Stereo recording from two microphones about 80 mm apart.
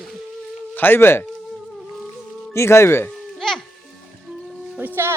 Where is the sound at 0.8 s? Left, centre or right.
Left.